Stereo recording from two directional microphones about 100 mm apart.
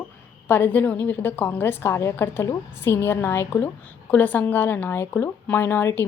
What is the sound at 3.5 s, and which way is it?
A woman's voice, 15° left (ahead or behind).